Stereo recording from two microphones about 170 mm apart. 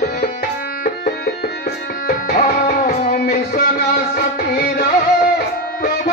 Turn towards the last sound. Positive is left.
turn(degrees=60)  # may be behind; listen again after turning